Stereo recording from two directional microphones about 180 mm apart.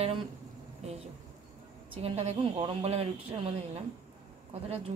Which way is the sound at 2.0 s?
35° right (ahead or behind).